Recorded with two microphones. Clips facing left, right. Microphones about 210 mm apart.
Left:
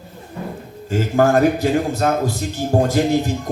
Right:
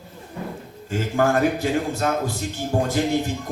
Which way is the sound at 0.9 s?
40° left (ahead or behind).